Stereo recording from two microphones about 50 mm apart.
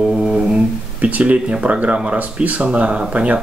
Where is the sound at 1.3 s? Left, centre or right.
Right.